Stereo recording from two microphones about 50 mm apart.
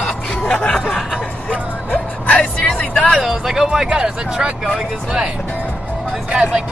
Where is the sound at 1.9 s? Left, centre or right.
Left.